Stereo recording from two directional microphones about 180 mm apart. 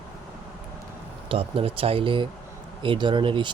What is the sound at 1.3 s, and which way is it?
Speech, 30° right (ahead or behind).